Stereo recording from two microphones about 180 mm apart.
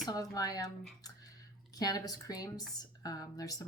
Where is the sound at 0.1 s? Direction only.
20° left (ahead or behind).